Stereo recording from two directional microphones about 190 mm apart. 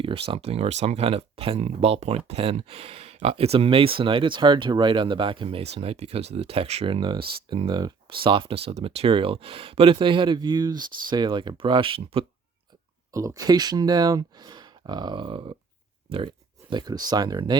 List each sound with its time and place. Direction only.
0.0 s speech: 30° right (ahead or behind)
13.1 s speech: 20° right (ahead or behind)